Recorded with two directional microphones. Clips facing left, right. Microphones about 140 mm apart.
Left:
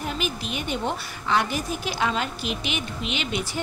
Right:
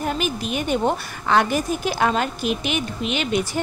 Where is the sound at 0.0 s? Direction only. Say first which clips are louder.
Right 5 dB; 50° right (ahead or behind).